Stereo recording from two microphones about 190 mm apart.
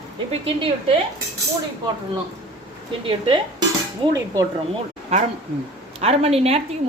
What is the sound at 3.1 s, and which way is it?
Speech, 25° right (ahead or behind).